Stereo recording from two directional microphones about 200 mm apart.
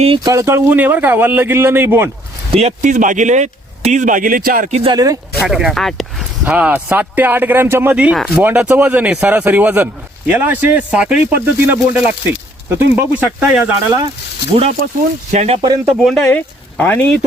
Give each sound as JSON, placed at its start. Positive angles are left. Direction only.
{"t": 0.0, "sound": "speech", "side_deg": -25}
{"t": 2.6, "sound": "speech", "side_deg": -35}
{"t": 4.8, "sound": "speech", "side_deg": -20}
{"t": 5.5, "sound": "speech", "side_deg": 0}
{"t": 14.5, "sound": "speech", "side_deg": -30}
{"t": 16.0, "sound": "speech", "side_deg": 5}